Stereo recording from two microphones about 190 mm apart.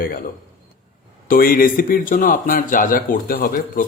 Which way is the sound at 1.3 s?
50° left (ahead or behind).